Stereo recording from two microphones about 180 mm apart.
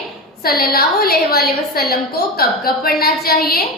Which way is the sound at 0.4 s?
55° left (ahead or behind).